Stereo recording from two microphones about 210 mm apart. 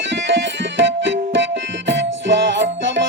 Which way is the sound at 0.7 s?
60° right (ahead or behind).